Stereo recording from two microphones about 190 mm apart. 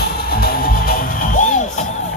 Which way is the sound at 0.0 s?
55° left (ahead or behind).